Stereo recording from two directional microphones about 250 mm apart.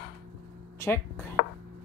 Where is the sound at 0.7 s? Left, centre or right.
Centre.